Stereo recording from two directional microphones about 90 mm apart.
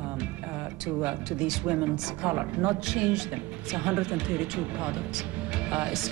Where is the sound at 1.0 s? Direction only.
10° right (ahead or behind).